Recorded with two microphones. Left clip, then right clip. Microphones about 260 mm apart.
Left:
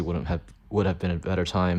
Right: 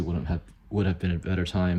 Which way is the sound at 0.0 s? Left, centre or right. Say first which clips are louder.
Left 3 dB; right.